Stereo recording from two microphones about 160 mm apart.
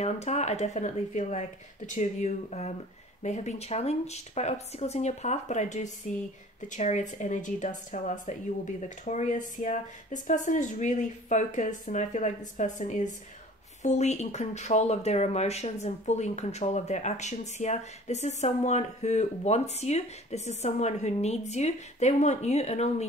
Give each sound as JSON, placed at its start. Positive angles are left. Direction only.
{"t": 0.0, "sound": "speech", "side_deg": 45}